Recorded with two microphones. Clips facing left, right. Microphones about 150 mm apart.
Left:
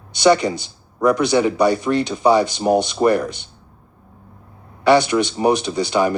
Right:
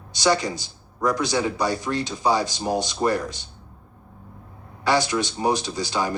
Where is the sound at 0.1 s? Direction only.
65° left (ahead or behind).